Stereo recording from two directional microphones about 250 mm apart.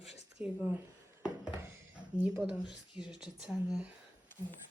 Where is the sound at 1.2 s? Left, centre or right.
Centre.